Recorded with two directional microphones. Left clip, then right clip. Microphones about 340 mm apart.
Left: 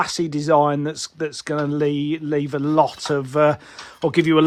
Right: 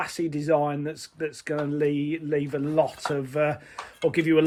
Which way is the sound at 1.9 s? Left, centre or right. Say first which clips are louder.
Left 5 dB; left.